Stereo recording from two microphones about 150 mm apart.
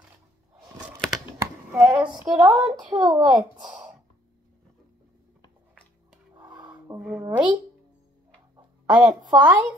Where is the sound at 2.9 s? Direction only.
25° right (ahead or behind).